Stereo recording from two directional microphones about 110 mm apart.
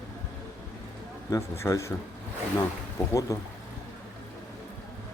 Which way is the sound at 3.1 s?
30° left (ahead or behind).